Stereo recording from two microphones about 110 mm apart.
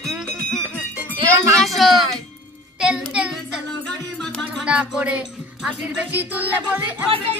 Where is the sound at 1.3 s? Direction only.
25° right (ahead or behind).